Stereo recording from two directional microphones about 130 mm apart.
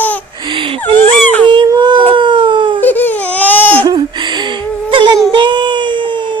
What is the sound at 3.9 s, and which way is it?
Whimper, 35° right (ahead or behind).